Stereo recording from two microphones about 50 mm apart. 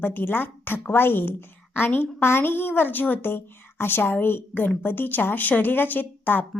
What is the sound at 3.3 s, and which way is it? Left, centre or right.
A woman's voice, left.